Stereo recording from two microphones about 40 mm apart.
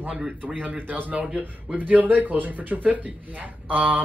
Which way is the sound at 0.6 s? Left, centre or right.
Right.